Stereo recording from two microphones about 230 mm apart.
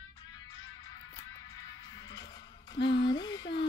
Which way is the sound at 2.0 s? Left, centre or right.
Centre.